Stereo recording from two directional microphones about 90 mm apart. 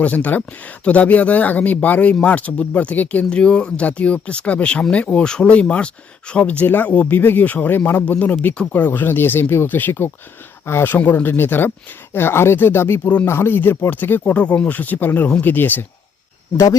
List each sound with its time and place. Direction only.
0.0 s speech: 15° left (ahead or behind)